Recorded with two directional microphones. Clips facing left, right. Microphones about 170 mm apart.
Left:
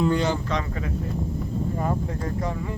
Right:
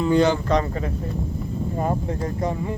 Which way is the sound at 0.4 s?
40° right (ahead or behind).